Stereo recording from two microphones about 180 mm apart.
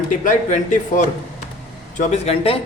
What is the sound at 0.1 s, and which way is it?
A man's voice, 45° left (ahead or behind).